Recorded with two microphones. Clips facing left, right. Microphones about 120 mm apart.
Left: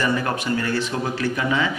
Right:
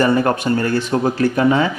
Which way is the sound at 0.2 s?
45° right (ahead or behind).